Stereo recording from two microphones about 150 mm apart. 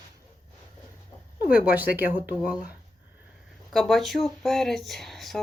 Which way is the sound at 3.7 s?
Centre (ahead or behind).